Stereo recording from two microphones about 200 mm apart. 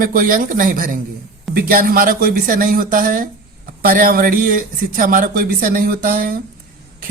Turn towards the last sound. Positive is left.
turn(degrees=-45)  # may be behind; listen again after turning